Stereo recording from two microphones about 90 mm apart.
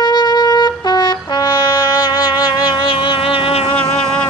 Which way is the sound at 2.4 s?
55° left (ahead or behind).